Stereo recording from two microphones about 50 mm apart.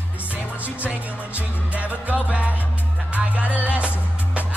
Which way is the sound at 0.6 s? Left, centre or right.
Right.